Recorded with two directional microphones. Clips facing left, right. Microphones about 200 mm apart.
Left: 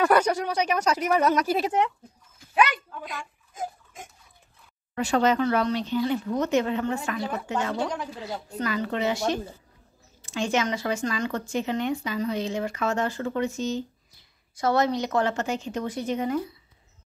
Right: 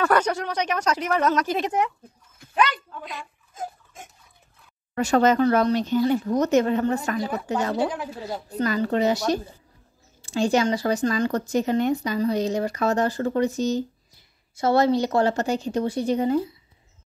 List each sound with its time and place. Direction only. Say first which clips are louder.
0.0 s a woman's voice: left 1 dB; 10° left (ahead or behind)
3.5 s pig: even; 15° left (ahead or behind)
4.9 s speech: right 4 dB; 45° right (ahead or behind); by 16.5 s 30° right (ahead or behind)